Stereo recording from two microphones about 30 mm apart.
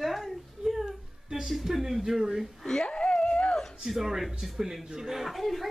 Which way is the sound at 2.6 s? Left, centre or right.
Left.